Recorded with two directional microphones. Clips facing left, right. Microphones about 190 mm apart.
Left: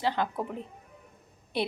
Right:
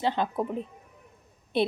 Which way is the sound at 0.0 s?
20° right (ahead or behind).